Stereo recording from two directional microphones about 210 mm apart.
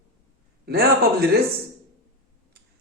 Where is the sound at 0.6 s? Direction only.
50° right (ahead or behind).